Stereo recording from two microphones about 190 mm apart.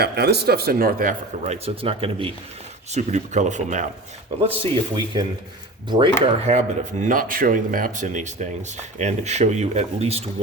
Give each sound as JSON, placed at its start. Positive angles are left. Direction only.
{"t": 0.0, "sound": "a man's voice", "side_deg": -60}
{"t": 1.6, "sound": "speech", "side_deg": -30}
{"t": 4.4, "sound": "speech", "side_deg": -25}
{"t": 6.2, "sound": "speech", "side_deg": -35}